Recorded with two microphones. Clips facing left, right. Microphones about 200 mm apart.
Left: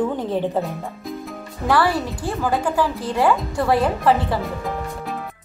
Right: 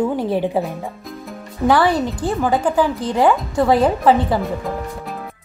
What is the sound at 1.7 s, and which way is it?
Speech, 20° right (ahead or behind).